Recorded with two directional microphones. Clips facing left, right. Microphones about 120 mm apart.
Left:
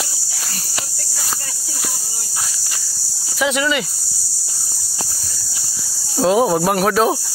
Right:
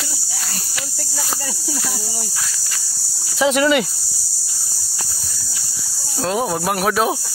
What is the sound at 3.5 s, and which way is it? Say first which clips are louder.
Speech: right 5 dB; 45° right (ahead or behind).